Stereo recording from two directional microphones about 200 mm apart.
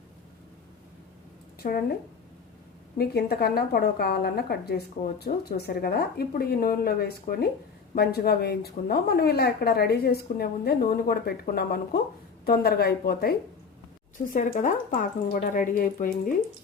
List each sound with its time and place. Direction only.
1.6 s a woman's voice: 45° left (ahead or behind)
3.0 s a woman's voice: 50° left (ahead or behind)
14.3 s a woman's voice: 40° left (ahead or behind)